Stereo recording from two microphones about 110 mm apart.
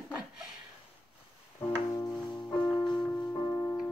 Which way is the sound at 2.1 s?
5° left (ahead or behind).